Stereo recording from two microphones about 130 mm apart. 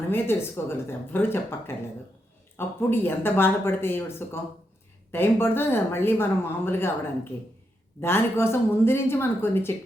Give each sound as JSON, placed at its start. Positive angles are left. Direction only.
{"t": 0.1, "sound": "speech", "side_deg": 15}
{"t": 8.0, "sound": "speech", "side_deg": 20}